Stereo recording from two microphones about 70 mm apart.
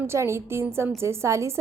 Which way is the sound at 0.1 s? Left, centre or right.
Right.